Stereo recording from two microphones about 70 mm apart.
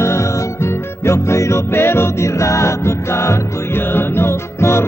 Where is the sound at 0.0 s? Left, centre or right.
Left.